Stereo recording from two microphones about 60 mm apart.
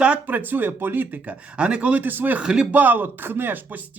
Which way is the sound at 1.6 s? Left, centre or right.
Centre.